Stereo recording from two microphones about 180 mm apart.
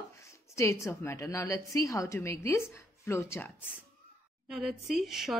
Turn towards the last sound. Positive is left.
turn(degrees=0)  # may be behind; listen again after turning